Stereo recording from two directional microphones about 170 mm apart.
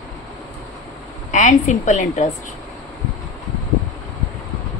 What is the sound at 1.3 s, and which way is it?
Speech, 45° left (ahead or behind).